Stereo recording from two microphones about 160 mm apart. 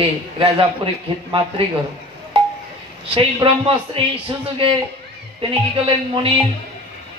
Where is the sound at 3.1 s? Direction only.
35° right (ahead or behind).